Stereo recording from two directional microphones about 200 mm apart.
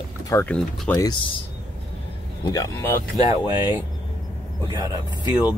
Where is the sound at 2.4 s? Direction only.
15° left (ahead or behind).